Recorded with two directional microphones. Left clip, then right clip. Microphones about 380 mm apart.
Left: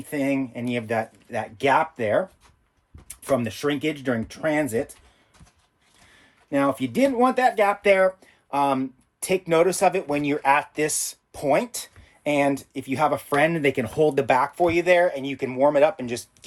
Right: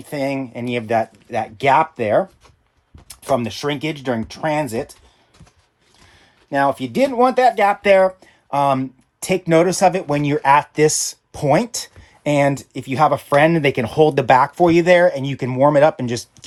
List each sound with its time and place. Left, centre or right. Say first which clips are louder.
0.1 s speech: right 3 dB; right
6.5 s speech: right 5 dB; right